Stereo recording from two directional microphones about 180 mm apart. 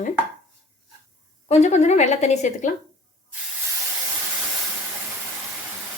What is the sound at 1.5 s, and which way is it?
A woman's voice, 40° left (ahead or behind).